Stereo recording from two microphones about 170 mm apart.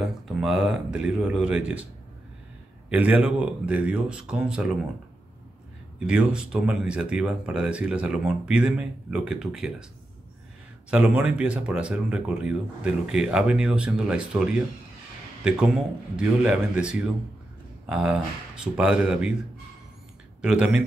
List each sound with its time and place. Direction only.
0.0 s speech: centre (ahead or behind)
2.9 s speech: 10° right (ahead or behind)
5.9 s speech: 5° right (ahead or behind)
10.9 s speech: 5° right (ahead or behind)
20.4 s speech: 5° right (ahead or behind)